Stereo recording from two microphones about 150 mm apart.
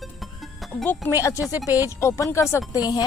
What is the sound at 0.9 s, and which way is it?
Speech, 15° left (ahead or behind).